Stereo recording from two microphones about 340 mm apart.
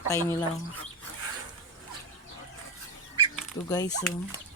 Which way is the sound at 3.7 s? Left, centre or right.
Centre.